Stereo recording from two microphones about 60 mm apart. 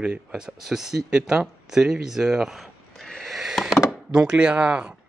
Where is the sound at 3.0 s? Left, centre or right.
Centre.